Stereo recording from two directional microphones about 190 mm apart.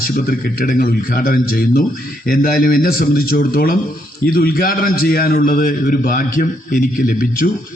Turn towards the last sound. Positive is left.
turn(degrees=45)  # may be behind; listen again after turning